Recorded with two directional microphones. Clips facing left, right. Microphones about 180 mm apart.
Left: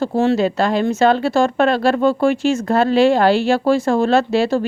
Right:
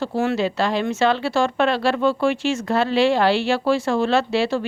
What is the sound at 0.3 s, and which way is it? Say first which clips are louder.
Speech: left 4 dB; 45° left (ahead or behind).